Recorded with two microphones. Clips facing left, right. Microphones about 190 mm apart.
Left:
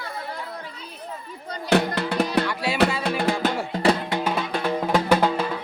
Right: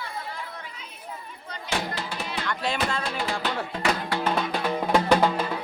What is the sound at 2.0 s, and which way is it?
Music, 65° left (ahead or behind).